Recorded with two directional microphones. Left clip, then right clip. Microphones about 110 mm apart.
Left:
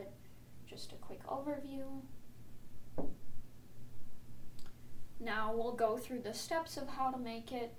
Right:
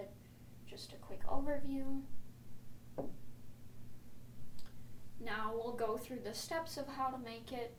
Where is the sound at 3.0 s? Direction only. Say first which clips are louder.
Even; centre (ahead or behind).